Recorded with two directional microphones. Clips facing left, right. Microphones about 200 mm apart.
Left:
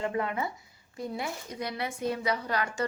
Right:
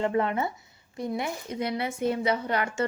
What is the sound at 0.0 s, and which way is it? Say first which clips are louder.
A woman's voice: right 5 dB; 30° right (ahead or behind).